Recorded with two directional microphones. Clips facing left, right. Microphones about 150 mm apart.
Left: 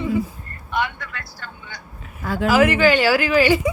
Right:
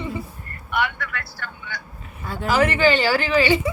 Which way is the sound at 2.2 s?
90° left.